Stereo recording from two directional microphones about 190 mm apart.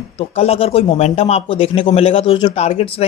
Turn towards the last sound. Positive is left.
turn(degrees=30)  # may be behind; listen again after turning